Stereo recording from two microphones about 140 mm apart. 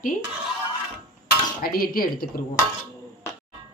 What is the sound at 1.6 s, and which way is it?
Speech, 90° left.